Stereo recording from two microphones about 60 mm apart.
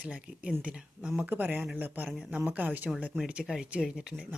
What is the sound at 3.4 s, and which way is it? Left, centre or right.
Speech, centre.